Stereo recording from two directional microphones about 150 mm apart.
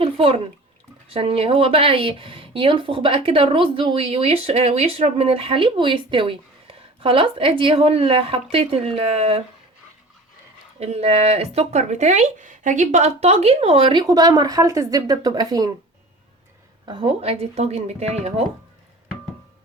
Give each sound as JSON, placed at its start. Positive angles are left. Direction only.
{"t": 0.0, "sound": "bathtub", "side_deg": -35}
{"t": 1.0, "sound": "speech", "side_deg": -40}
{"t": 10.8, "sound": "speech", "side_deg": -45}
{"t": 16.8, "sound": "speech", "side_deg": -35}